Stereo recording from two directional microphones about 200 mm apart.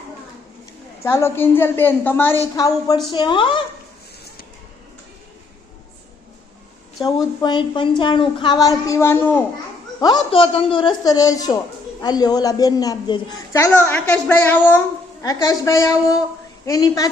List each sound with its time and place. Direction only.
1.0 s a woman's voice: 15° left (ahead or behind)
7.0 s a woman's voice: 20° left (ahead or behind)
10.0 s a woman's voice: 25° left (ahead or behind)